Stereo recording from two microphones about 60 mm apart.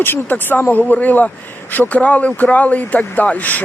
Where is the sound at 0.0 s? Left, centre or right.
Left.